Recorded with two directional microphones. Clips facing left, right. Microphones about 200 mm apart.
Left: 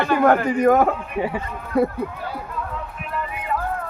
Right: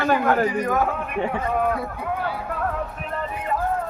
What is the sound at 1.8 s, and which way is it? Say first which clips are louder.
Speech: left 4 dB; 55° left (ahead or behind).